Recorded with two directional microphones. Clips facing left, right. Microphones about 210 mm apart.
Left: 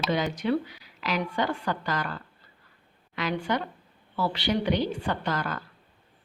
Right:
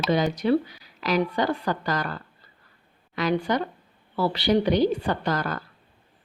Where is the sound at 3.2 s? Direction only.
40° right (ahead or behind).